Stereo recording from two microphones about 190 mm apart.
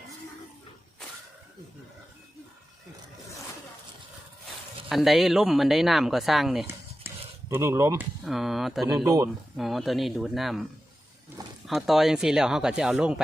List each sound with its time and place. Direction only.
4.9 s speech: centre (ahead or behind)
7.1 s a sound: 10° right (ahead or behind)
7.5 s speech: 15° right (ahead or behind)
8.2 s speech: centre (ahead or behind)
9.0 s speech: 20° right (ahead or behind)
9.6 s speech: centre (ahead or behind)
11.6 s speech: centre (ahead or behind)